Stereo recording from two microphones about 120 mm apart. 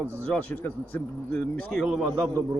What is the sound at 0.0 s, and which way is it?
Speech, 15° left (ahead or behind).